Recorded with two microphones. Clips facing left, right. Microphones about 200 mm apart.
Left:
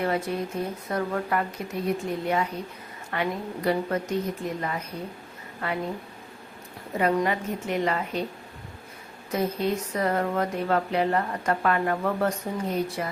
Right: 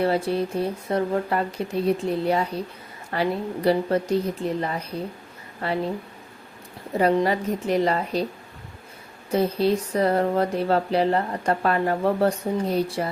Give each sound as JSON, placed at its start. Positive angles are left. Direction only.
{"t": 0.0, "sound": "speech", "side_deg": -30}
{"t": 6.9, "sound": "speech", "side_deg": -30}
{"t": 9.3, "sound": "speech", "side_deg": -30}